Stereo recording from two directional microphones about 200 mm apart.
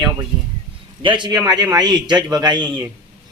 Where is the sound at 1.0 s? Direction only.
25° right (ahead or behind).